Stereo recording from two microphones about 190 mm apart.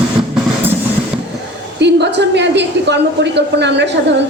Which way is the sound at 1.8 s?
65° right (ahead or behind).